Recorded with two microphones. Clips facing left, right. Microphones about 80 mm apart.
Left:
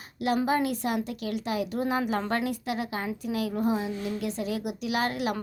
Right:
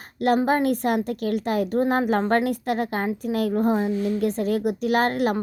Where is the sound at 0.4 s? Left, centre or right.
Right.